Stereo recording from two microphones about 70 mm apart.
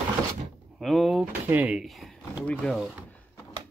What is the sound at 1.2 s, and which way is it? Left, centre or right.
Speech, right.